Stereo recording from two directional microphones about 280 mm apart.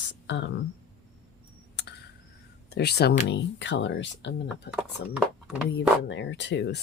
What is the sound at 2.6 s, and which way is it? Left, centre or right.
Speech, left.